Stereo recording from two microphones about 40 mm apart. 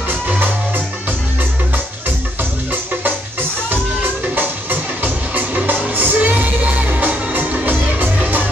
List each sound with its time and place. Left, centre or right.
4.4 s music: right